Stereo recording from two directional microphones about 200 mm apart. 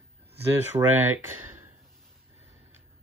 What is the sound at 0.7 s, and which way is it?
Speech, 20° right (ahead or behind).